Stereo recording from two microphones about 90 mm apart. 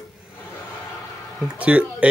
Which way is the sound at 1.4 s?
15° right (ahead or behind).